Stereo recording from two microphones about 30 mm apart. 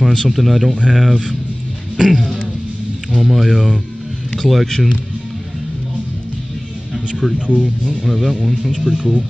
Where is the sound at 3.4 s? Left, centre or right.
Centre.